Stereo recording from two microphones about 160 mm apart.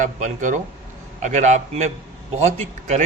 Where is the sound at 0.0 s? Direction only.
50° right (ahead or behind).